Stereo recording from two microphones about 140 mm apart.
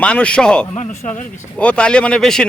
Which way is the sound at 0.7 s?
55° left (ahead or behind).